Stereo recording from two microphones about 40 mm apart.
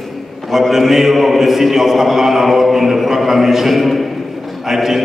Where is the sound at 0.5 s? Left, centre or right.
Centre.